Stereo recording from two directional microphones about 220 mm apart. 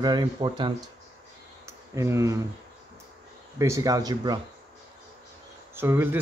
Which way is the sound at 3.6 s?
15° right (ahead or behind).